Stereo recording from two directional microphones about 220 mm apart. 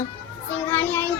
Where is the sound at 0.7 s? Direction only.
10° left (ahead or behind).